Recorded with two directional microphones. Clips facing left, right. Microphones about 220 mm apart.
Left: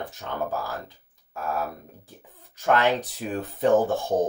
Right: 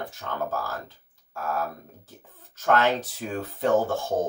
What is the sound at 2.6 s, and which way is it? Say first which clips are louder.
Speech: left 1 dB; 15° left (ahead or behind).